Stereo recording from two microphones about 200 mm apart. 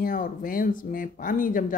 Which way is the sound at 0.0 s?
45° left (ahead or behind).